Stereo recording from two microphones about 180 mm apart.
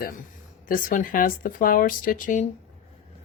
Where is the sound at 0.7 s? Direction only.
50° left (ahead or behind).